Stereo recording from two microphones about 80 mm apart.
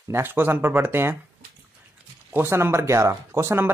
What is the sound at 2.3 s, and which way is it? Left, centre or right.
A man's voice, right.